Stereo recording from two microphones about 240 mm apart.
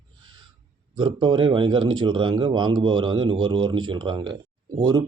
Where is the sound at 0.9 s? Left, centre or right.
Centre.